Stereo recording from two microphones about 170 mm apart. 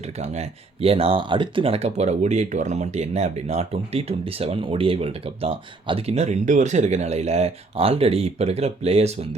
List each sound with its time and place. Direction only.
0.0 s speech: 40° right (ahead or behind)